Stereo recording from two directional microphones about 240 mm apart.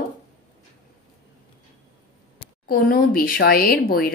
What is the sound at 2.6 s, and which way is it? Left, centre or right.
Speech, left.